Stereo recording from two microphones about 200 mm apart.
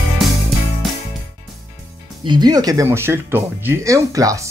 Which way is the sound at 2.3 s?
20° right (ahead or behind).